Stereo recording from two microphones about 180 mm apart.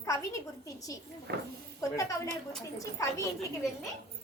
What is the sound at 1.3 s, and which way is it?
Speech, 65° right (ahead or behind).